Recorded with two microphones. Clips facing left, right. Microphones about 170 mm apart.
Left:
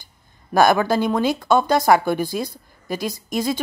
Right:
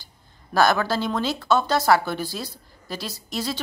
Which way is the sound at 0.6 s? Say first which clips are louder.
Left 4 dB; 15° left (ahead or behind).